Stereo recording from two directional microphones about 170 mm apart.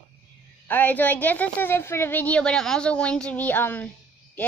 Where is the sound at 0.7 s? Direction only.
10° left (ahead or behind).